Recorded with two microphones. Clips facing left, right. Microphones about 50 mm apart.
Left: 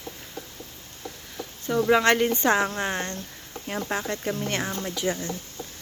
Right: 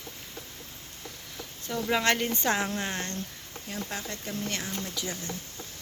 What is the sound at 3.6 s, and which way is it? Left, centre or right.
Speech, left.